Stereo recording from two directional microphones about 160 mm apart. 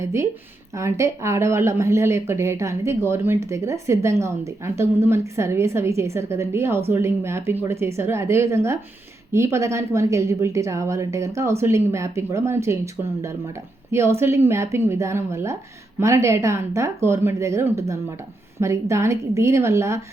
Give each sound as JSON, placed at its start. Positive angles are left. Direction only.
{"t": 0.0, "sound": "a woman's voice", "side_deg": -15}